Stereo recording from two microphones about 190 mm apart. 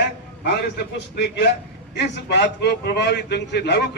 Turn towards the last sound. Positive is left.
turn(degrees=65)  # may be behind; listen again after turning